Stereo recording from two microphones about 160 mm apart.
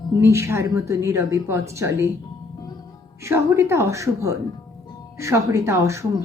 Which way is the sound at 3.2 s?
15° right (ahead or behind).